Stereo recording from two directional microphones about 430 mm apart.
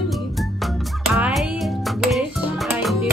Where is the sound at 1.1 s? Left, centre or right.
Centre.